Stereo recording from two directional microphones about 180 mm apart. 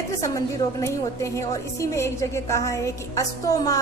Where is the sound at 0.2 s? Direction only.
15° left (ahead or behind).